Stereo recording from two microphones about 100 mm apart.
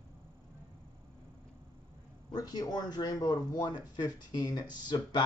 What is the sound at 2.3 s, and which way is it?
Speech, 40° left (ahead or behind).